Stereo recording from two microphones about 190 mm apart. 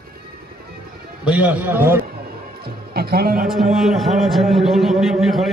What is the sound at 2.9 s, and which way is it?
Speech, 55° right (ahead or behind).